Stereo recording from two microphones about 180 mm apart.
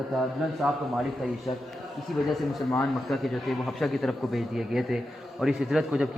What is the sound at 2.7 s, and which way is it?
A man's voice, centre (ahead or behind).